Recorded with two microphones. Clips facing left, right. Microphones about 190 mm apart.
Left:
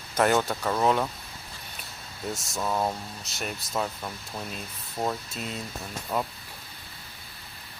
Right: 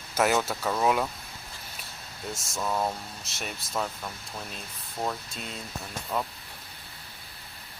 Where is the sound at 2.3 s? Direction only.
Centre (ahead or behind).